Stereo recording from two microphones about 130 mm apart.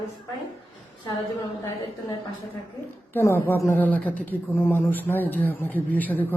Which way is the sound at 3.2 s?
20° left (ahead or behind).